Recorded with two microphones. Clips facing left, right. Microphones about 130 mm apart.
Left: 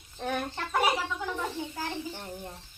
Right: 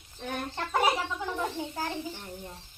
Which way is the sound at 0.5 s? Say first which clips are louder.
Right 3 dB; 25° right (ahead or behind).